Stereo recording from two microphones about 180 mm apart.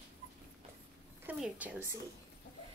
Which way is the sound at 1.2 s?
5° right (ahead or behind).